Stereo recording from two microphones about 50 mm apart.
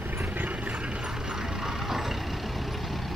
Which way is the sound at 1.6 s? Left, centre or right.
Centre.